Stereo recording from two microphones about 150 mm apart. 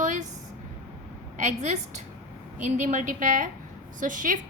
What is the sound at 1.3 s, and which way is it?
A woman's voice, 50° right (ahead or behind).